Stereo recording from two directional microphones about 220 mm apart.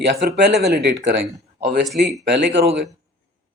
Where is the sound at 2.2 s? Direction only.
50° right (ahead or behind).